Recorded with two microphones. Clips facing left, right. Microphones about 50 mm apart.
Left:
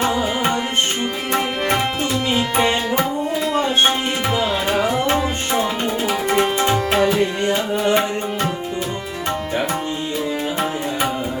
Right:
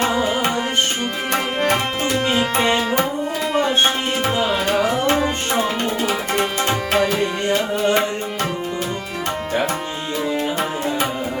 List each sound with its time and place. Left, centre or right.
2.4 s music: centre
4.4 s tabla: centre
5.1 s tabla: centre
5.8 s tabla: centre
7.4 s music: centre